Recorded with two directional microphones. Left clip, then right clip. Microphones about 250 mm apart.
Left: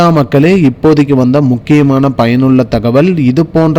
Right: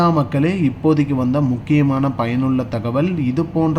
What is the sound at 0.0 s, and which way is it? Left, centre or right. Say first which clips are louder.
A man's voice: left 9 dB; left.